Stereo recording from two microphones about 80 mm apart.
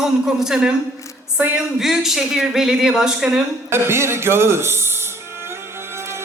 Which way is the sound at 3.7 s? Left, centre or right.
Right.